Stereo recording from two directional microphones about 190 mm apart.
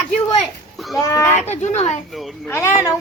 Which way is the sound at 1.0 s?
15° left (ahead or behind).